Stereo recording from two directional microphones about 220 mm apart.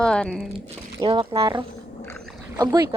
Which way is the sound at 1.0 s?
20° right (ahead or behind).